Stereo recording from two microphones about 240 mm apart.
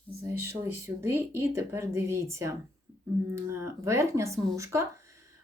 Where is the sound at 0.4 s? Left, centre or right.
Centre.